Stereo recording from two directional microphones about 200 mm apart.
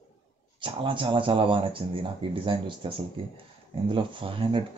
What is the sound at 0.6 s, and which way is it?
Speech, 25° right (ahead or behind).